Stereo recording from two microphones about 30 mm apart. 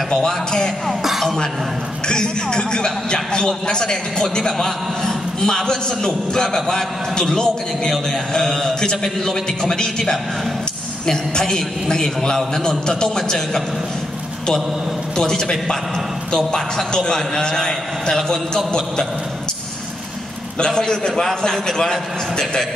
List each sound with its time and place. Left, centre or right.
0.1 s a man's voice: left
2.0 s a man's voice: left
15.1 s a man's voice: left
16.9 s a man's voice: left
20.5 s a man's voice: left